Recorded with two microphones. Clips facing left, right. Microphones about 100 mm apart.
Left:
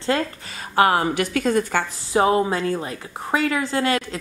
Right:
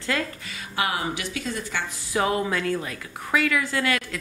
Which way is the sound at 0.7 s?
45° left (ahead or behind).